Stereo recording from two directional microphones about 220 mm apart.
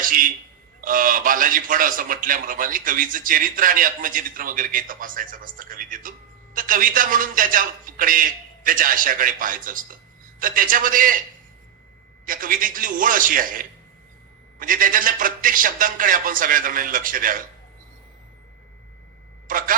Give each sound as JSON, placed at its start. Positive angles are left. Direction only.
{"t": 0.0, "sound": "a sound", "side_deg": -40}
{"t": 0.8, "sound": "a man's voice", "side_deg": -40}
{"t": 12.2, "sound": "a man's voice", "side_deg": -40}
{"t": 19.5, "sound": "a man's voice", "side_deg": -40}